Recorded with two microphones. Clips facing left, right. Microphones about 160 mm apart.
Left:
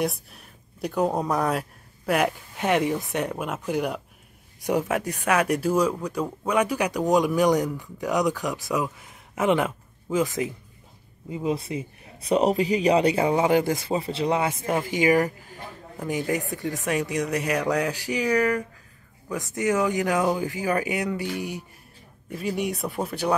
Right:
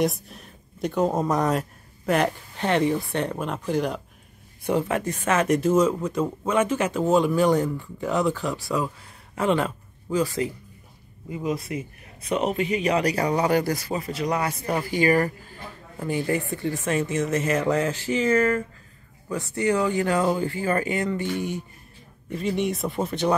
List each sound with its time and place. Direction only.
0.0 s a man's voice: centre (ahead or behind)
5.8 s speech: 5° right (ahead or behind)
6.5 s speech: 10° left (ahead or behind)
20.2 s speech: centre (ahead or behind)
20.4 s speech: 15° left (ahead or behind)